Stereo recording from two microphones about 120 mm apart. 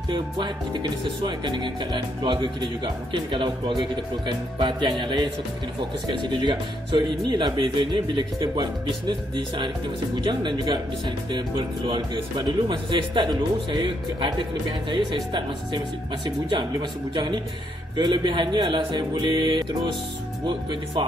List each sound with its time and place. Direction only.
0.1 s speech: 40° right (ahead or behind)
10.1 s speech: 40° right (ahead or behind)
17.1 s speech: 40° right (ahead or behind)